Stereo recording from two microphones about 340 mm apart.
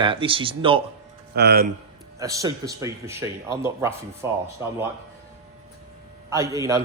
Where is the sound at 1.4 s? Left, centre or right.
Right.